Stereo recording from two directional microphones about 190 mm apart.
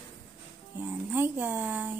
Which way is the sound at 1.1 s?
10° right (ahead or behind).